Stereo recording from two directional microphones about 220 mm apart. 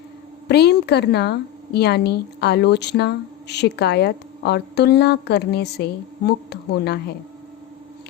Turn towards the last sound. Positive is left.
turn(degrees=45)  # may be behind; listen again after turning